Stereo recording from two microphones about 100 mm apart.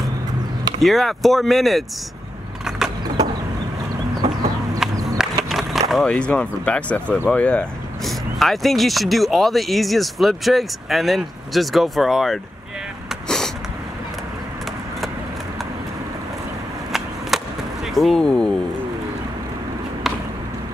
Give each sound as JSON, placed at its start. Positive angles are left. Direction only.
{"t": 0.7, "sound": "speech", "side_deg": 0}
{"t": 4.1, "sound": "chicken", "side_deg": -40}
{"t": 5.0, "sound": "skateboard", "side_deg": -5}
{"t": 7.2, "sound": "speech", "side_deg": 10}
{"t": 8.0, "sound": "speech", "side_deg": 0}
{"t": 17.3, "sound": "skateboard", "side_deg": 0}
{"t": 17.8, "sound": "speech", "side_deg": 0}